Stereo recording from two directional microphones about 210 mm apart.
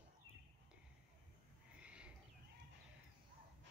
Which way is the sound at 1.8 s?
5° right (ahead or behind).